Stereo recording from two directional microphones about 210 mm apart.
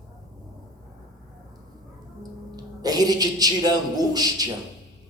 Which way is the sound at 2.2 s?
20° right (ahead or behind).